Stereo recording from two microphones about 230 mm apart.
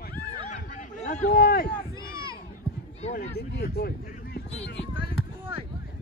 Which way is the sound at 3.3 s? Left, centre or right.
Left.